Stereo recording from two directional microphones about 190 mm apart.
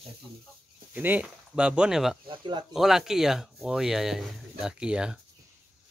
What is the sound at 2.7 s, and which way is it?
Speech, centre (ahead or behind).